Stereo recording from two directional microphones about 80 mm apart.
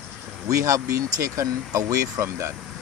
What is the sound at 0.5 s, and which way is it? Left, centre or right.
Speech, right.